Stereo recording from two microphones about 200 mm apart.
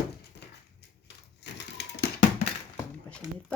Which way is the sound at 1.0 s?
60° left (ahead or behind).